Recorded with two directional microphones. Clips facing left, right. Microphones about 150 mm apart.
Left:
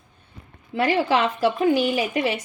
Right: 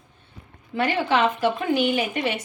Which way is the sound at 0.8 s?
35° left (ahead or behind).